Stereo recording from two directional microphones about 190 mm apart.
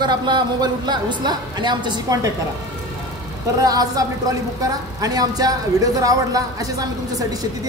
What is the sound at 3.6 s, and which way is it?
Speech, 20° right (ahead or behind).